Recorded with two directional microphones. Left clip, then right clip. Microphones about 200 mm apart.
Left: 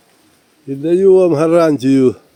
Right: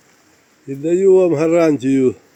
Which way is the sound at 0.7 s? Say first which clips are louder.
Left 2 dB; 20° left (ahead or behind).